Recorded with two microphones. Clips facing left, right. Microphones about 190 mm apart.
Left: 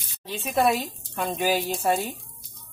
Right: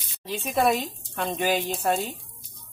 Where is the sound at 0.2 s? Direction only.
Centre (ahead or behind).